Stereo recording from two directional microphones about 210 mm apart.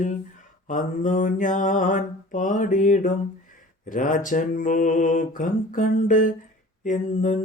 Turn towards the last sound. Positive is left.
turn(degrees=35)  # may be behind; listen again after turning